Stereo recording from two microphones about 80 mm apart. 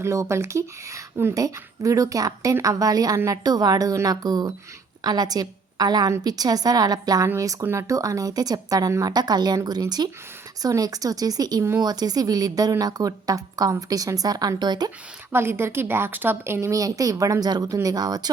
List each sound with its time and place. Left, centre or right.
0.0 s a woman's voice: right
15.3 s a woman's voice: right